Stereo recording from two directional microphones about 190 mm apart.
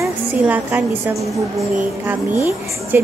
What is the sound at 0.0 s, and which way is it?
A woman's voice, 10° right (ahead or behind).